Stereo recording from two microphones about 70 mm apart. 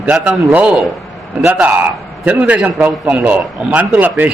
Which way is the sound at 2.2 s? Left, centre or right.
Right.